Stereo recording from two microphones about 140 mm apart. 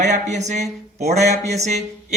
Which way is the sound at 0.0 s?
55° right (ahead or behind).